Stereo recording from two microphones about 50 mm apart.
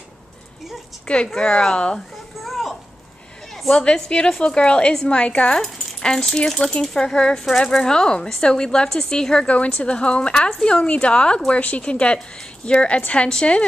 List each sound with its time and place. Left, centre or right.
1.0 s a woman's voice: left
2.4 s a sound: centre
3.8 s a woman's voice: centre
5.6 s a woman's voice: centre